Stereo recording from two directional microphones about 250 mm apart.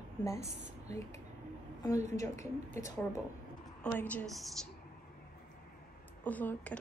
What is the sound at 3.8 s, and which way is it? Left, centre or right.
Speech, centre.